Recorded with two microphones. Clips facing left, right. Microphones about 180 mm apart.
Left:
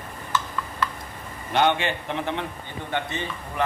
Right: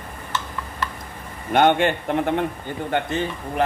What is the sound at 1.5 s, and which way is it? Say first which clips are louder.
Speech: right 5 dB; 50° right (ahead or behind).